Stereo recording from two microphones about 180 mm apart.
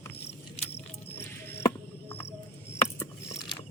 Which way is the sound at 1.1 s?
15° left (ahead or behind).